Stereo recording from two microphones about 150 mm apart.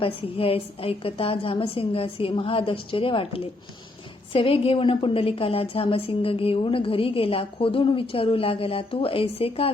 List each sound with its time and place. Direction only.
0.0 s a woman's voice: 40° left (ahead or behind)